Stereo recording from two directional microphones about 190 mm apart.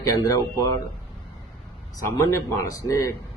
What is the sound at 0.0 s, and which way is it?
Speech, 15° left (ahead or behind).